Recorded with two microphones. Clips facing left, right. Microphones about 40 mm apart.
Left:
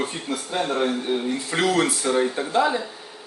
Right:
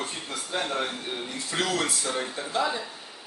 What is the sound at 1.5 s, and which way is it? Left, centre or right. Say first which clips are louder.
Speech: left 6 dB; left.